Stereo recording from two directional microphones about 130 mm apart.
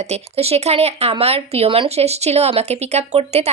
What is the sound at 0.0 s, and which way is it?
A woman's voice, 55° right (ahead or behind).